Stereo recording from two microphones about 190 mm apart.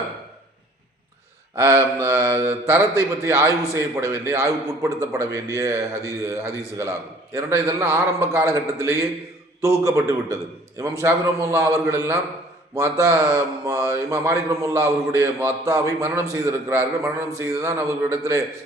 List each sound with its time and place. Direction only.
1.5 s a man's voice: 15° right (ahead or behind)